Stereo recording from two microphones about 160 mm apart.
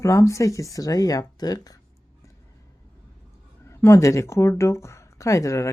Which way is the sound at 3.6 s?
15° left (ahead or behind).